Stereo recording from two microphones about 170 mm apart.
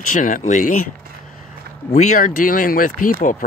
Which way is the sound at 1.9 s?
45° left (ahead or behind).